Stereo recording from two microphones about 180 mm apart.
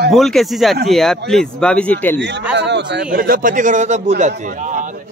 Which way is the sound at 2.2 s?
75° right (ahead or behind).